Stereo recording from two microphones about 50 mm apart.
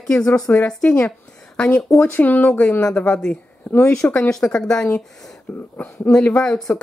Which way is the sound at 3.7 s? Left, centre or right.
Centre.